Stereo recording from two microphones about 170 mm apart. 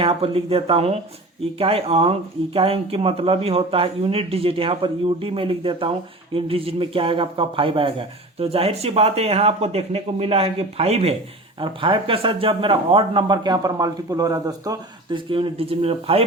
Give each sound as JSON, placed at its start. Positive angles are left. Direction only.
{"t": 0.0, "sound": "speech", "side_deg": -35}